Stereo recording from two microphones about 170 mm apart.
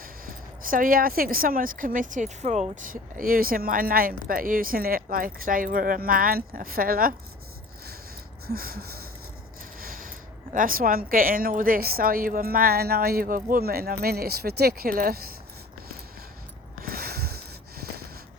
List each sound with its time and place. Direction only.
0.0 s speech: 55° right (ahead or behind)
8.4 s speech: 60° right (ahead or behind)
16.8 s a sound: 60° right (ahead or behind)